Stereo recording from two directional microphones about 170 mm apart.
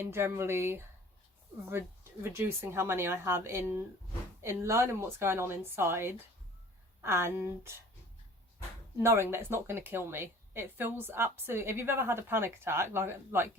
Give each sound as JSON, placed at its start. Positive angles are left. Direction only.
{"t": 0.0, "sound": "speech", "side_deg": -15}
{"t": 2.3, "sound": "speech", "side_deg": -15}
{"t": 9.3, "sound": "speech", "side_deg": -15}